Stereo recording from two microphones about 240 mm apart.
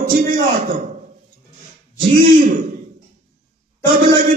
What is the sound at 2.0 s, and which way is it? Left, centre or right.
Speech, right.